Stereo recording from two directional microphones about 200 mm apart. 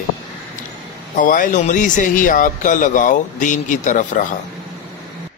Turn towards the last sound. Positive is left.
turn(degrees=40)  # may be behind; listen again after turning